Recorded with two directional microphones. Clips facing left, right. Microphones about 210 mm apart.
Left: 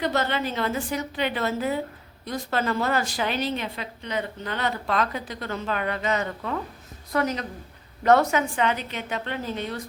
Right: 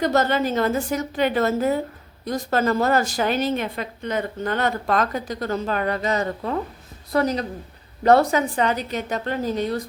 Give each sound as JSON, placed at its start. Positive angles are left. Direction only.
{"t": 0.0, "sound": "a woman's voice", "side_deg": -45}